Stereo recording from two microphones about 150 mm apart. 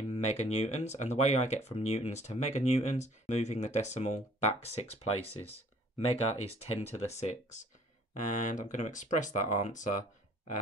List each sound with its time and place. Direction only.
0.1 s speech: 50° left (ahead or behind)